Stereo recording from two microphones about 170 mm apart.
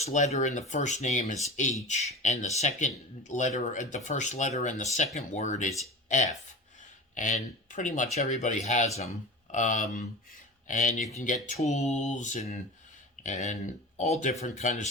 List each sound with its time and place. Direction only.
0.0 s speech: 40° left (ahead or behind)